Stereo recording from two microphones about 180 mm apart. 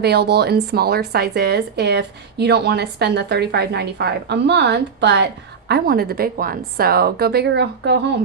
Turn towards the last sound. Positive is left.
turn(degrees=-70)  # may be behind; listen again after turning